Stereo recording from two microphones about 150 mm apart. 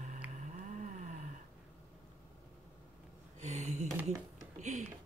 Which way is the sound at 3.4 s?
50° right (ahead or behind).